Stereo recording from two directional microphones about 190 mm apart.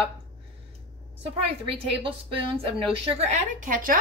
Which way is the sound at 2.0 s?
30° right (ahead or behind).